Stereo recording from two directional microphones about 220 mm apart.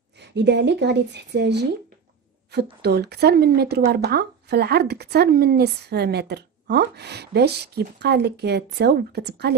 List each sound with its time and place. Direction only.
0.2 s speech: 50° right (ahead or behind)